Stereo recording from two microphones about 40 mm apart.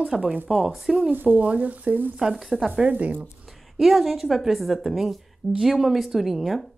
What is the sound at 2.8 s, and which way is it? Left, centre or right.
Speech, right.